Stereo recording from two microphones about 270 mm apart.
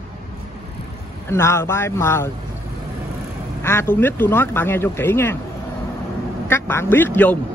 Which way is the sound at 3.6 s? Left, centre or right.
Centre.